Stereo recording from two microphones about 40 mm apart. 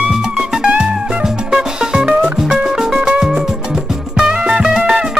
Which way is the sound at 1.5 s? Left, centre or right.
Centre.